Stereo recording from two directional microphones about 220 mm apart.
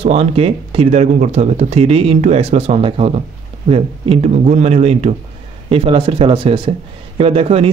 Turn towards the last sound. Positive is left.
turn(degrees=-25)  # may be behind; listen again after turning